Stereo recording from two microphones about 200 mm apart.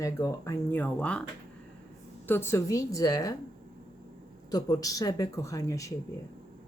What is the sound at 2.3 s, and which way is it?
A woman's voice, 10° left (ahead or behind).